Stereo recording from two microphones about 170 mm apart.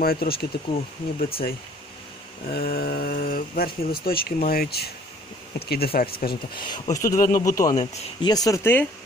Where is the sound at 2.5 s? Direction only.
65° left (ahead or behind).